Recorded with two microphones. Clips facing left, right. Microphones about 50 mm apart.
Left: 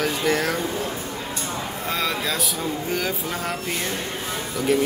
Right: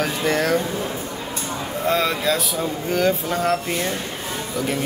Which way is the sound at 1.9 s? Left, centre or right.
Centre.